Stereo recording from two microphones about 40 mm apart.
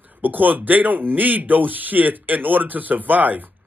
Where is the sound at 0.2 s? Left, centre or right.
Right.